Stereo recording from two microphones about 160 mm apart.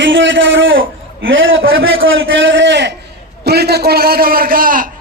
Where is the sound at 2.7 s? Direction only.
90° right; by 4.9 s 60° right (ahead or behind).